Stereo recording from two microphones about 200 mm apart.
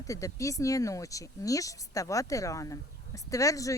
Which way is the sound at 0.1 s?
15° left (ahead or behind).